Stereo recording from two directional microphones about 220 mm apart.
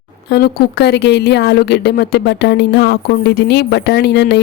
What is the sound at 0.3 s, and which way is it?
Speech, 45° left (ahead or behind).